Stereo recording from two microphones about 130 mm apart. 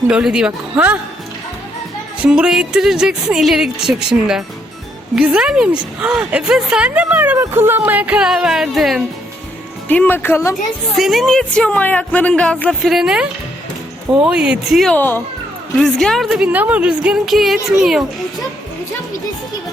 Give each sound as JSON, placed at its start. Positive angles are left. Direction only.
{"t": 0.1, "sound": "a woman's voice", "side_deg": -5}
{"t": 2.2, "sound": "a woman's voice", "side_deg": -5}
{"t": 9.9, "sound": "a woman's voice", "side_deg": 15}
{"t": 10.5, "sound": "a woman's voice", "side_deg": 0}
{"t": 12.8, "sound": "a woman's voice", "side_deg": 0}
{"t": 14.9, "sound": "a woman's voice", "side_deg": 15}
{"t": 15.8, "sound": "a woman's voice", "side_deg": 5}